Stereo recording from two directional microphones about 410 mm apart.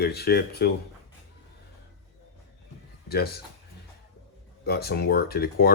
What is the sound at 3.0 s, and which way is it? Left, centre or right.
Speech, left.